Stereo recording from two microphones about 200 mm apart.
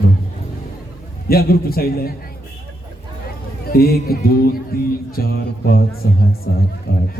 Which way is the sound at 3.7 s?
50° left (ahead or behind).